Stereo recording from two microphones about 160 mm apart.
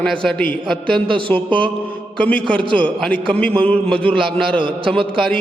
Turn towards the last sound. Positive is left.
turn(degrees=5)  # may be behind; listen again after turning